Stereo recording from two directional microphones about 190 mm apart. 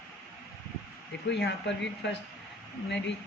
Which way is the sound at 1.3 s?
65° left (ahead or behind).